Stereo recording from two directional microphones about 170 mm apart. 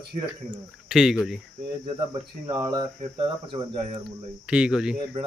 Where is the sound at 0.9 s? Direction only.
5° right (ahead or behind).